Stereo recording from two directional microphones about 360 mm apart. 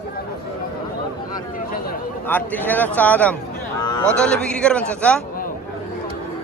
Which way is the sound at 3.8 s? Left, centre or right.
Centre.